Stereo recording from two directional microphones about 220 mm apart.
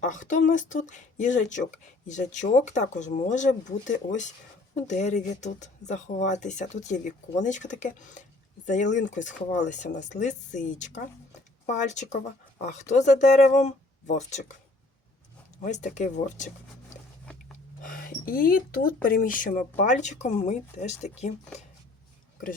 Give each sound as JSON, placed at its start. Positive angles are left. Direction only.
{"t": 0.0, "sound": "speech", "side_deg": 35}
{"t": 15.6, "sound": "speech", "side_deg": 35}
{"t": 17.8, "sound": "speech", "side_deg": 40}